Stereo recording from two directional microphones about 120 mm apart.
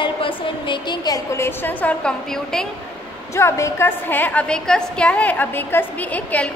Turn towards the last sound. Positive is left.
turn(degrees=10)  # may be behind; listen again after turning